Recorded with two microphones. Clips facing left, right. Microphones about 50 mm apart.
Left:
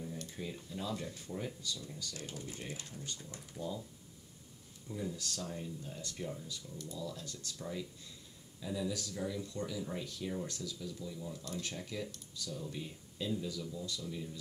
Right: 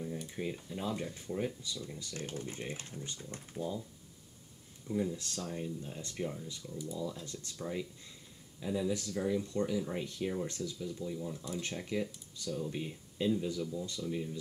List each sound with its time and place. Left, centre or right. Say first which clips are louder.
0.0 s a sound: right 4 dB; centre
0.4 s speech: right 4 dB; right
2.1 s speech: right 8 dB; right
4.8 s speech: right 7 dB; centre
5.1 s speech: right 2 dB; right
6.7 s speech: right 5 dB; centre
11.1 s speech: right 3 dB; centre
11.6 s speech: right 5 dB; right